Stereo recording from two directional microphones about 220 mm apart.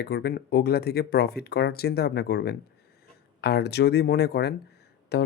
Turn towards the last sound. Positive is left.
turn(degrees=50)  # may be behind; listen again after turning